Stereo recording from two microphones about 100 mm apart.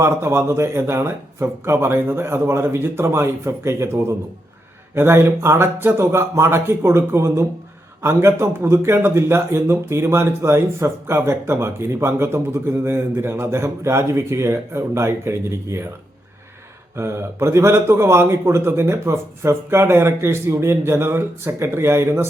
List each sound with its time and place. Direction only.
0.0 s speech: 25° right (ahead or behind)
17.0 s speech: 25° right (ahead or behind)